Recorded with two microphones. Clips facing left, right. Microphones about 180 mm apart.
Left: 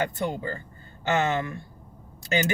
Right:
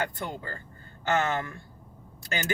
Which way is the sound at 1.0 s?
20° left (ahead or behind).